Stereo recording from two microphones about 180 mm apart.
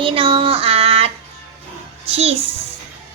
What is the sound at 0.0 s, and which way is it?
Child singing, 30° right (ahead or behind).